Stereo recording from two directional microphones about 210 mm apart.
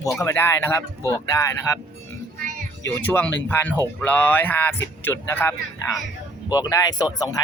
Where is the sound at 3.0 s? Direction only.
10° left (ahead or behind).